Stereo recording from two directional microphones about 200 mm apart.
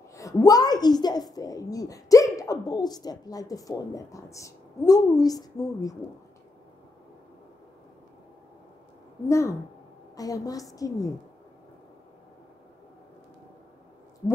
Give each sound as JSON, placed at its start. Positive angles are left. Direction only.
{"t": 0.1, "sound": "a woman's voice", "side_deg": 15}
{"t": 9.3, "sound": "a woman's voice", "side_deg": 15}